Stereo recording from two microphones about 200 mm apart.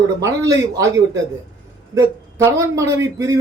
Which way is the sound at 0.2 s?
20° right (ahead or behind).